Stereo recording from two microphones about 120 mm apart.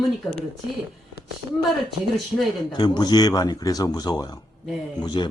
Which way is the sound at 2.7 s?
35° left (ahead or behind).